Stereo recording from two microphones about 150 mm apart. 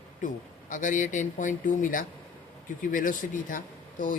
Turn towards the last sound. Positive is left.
turn(degrees=65)  # may be behind; listen again after turning